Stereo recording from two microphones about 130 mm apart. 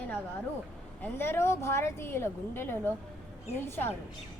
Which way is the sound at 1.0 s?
15° left (ahead or behind).